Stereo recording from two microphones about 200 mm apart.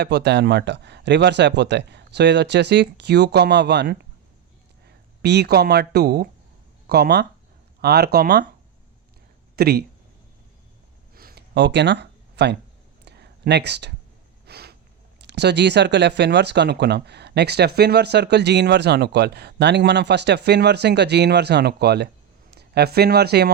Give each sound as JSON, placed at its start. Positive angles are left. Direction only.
{"t": 0.0, "sound": "speech", "side_deg": -55}
{"t": 5.2, "sound": "speech", "side_deg": -55}
{"t": 9.6, "sound": "speech", "side_deg": -50}
{"t": 11.1, "sound": "a sound", "side_deg": -50}
{"t": 15.2, "sound": "speech", "side_deg": -55}